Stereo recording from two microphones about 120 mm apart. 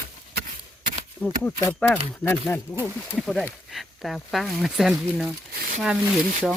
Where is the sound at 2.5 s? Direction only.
25° left (ahead or behind).